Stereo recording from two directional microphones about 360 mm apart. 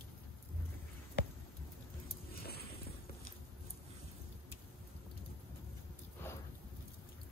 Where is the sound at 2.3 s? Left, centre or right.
Left.